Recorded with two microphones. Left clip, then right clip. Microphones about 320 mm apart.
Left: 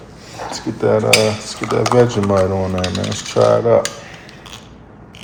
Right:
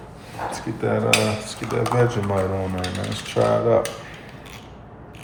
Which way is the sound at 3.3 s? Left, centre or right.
Left.